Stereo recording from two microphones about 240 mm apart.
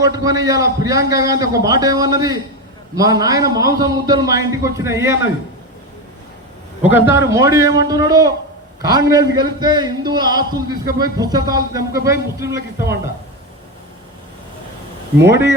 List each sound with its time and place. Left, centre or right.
0.0 s a man's voice: centre
6.8 s a man's voice: centre
15.2 s a man's voice: centre